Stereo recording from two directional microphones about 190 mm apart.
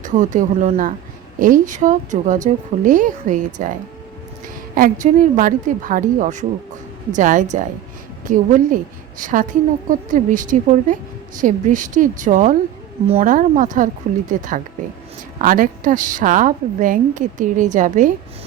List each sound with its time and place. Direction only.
0.0 s a woman's voice: 40° right (ahead or behind)
4.7 s a woman's voice: 45° right (ahead or behind)